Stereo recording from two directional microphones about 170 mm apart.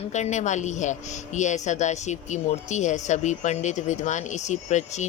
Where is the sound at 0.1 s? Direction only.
45° left (ahead or behind).